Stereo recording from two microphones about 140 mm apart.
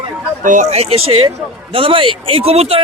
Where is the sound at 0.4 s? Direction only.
60° right (ahead or behind).